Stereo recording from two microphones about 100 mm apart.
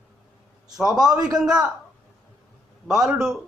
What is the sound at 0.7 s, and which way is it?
Speech, 5° right (ahead or behind).